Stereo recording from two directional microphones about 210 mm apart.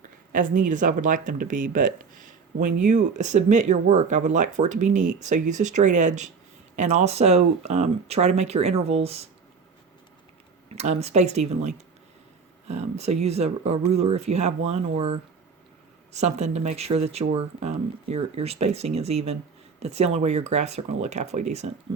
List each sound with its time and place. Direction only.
0.3 s speech: 40° right (ahead or behind)
10.8 s speech: 30° right (ahead or behind)
16.1 s speech: 30° right (ahead or behind)